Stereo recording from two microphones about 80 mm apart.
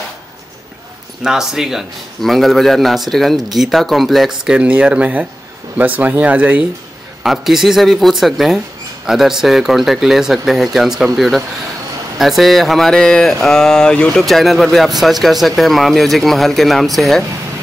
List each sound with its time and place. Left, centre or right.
1.2 s a man's voice: centre
7.2 s a man's voice: centre
14.2 s a man's voice: centre